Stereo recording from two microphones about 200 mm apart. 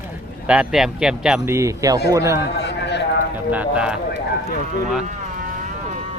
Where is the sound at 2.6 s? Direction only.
60° left (ahead or behind).